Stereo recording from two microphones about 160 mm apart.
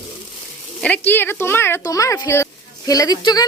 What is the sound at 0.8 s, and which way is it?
A woman's voice, 10° left (ahead or behind).